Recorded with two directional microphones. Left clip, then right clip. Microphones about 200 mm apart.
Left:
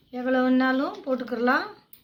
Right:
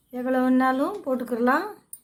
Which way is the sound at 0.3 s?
50° right (ahead or behind).